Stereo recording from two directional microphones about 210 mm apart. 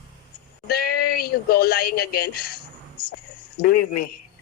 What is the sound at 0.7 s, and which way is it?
Speech, 45° left (ahead or behind).